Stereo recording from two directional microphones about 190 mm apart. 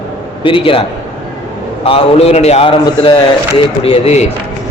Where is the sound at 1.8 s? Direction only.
30° left (ahead or behind).